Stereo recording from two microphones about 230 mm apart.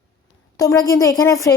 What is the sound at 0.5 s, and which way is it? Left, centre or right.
Speech, centre.